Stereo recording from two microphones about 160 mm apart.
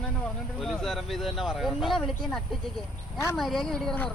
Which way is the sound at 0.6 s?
Centre (ahead or behind).